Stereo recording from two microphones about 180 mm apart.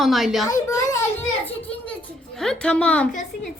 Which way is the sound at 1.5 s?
10° left (ahead or behind).